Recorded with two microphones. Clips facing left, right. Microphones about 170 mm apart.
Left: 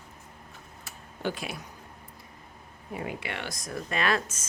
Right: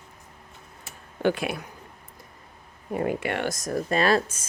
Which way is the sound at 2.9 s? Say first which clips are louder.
Right 9 dB; 50° right (ahead or behind).